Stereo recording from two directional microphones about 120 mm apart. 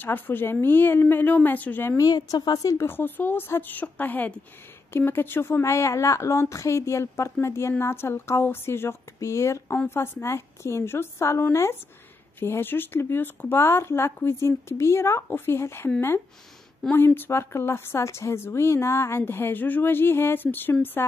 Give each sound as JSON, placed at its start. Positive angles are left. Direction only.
{"t": 0.0, "sound": "a woman's voice", "side_deg": 15}
{"t": 2.0, "sound": "a woman's voice", "side_deg": 35}
{"t": 16.9, "sound": "speech", "side_deg": 15}